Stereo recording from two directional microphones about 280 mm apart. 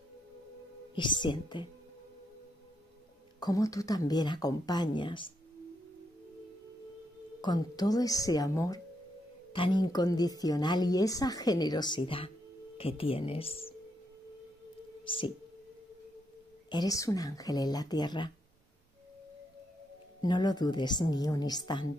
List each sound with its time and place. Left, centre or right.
0.9 s a woman's voice: centre
3.3 s a woman's voice: centre
7.4 s a woman's voice: centre
15.0 s a woman's voice: centre
16.7 s a woman's voice: centre
20.2 s a woman's voice: centre